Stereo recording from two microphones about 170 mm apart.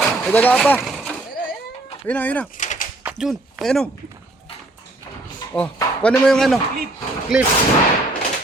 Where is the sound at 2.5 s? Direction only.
50° left (ahead or behind).